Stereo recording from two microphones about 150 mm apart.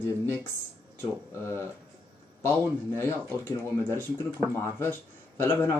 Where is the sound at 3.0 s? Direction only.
15° left (ahead or behind).